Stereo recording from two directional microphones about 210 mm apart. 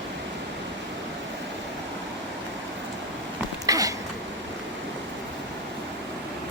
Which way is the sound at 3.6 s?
15° right (ahead or behind).